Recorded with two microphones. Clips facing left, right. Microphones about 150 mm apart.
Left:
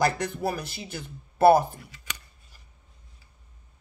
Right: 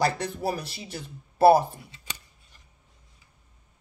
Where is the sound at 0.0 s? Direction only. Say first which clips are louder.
Left 1 dB; 30° right (ahead or behind).